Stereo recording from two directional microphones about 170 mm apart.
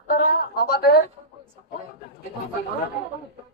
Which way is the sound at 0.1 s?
55° left (ahead or behind).